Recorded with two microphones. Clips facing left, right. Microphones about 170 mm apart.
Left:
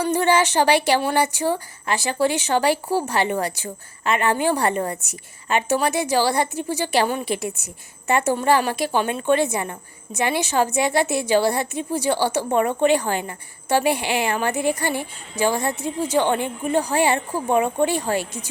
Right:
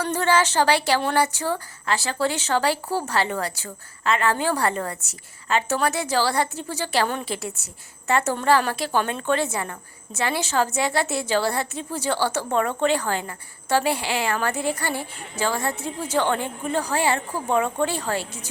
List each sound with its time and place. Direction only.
0.0 s speech: 15° left (ahead or behind)